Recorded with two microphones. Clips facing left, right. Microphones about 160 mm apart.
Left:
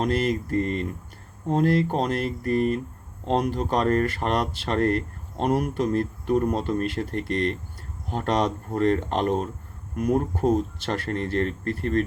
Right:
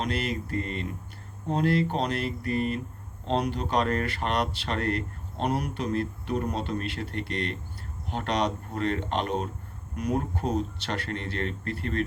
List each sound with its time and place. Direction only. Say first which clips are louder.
0.0 s speech: left 6 dB; 45° left (ahead or behind)